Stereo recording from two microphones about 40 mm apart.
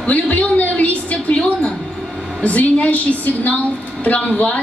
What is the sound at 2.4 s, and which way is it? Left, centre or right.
A woman's voice, left.